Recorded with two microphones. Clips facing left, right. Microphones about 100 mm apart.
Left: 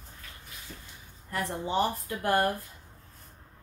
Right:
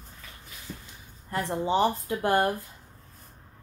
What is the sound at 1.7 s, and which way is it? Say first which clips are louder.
Speech: right 4 dB; 30° right (ahead or behind).